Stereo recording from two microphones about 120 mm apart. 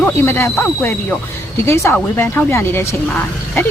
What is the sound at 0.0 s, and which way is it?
A woman's voice, 20° left (ahead or behind).